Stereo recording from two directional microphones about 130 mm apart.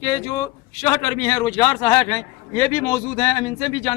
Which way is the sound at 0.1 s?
25° left (ahead or behind).